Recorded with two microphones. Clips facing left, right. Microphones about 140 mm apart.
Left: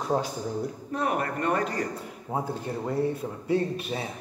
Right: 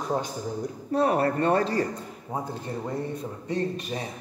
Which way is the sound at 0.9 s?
30° right (ahead or behind).